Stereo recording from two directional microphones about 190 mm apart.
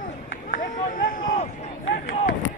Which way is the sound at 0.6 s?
45° left (ahead or behind).